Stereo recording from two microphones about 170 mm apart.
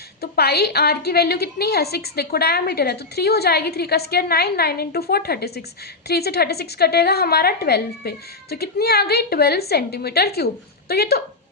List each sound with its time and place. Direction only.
0.2 s a woman's voice: 70° left (ahead or behind)